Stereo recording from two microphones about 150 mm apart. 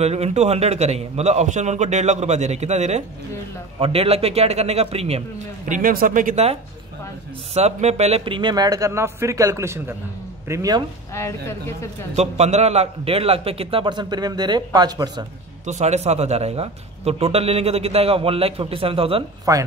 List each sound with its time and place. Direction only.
0.0 s a man's voice: 45° right (ahead or behind)
5.7 s a man's voice: 70° right (ahead or behind)
7.5 s speech: 45° right (ahead or behind); by 10.8 s 25° right (ahead or behind)
11.1 s speech: 20° left (ahead or behind)
12.2 s a man's voice: 45° right (ahead or behind); by 15.2 s 30° right (ahead or behind)
15.6 s a man's voice: 50° right (ahead or behind)
19.5 s speech: 25° right (ahead or behind)